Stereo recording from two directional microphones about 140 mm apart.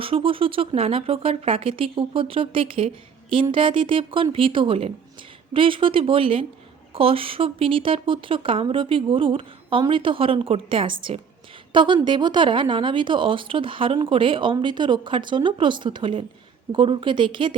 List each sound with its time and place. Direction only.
0.0 s a woman's voice: 40° right (ahead or behind)